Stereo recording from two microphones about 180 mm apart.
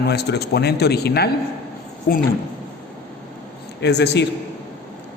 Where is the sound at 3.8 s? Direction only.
70° left (ahead or behind).